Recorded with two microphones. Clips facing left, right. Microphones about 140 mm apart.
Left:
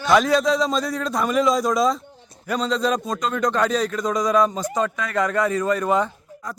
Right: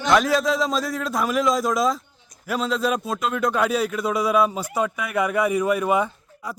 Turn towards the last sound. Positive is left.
turn(degrees=-10)  # may be behind; listen again after turning